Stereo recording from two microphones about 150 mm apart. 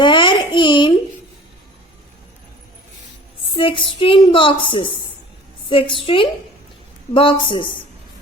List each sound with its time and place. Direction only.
0.0 s babbling: 30° left (ahead or behind)
3.5 s a woman's voice: 35° left (ahead or behind)